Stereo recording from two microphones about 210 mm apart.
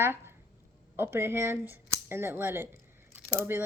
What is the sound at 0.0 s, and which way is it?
Speech, 10° right (ahead or behind).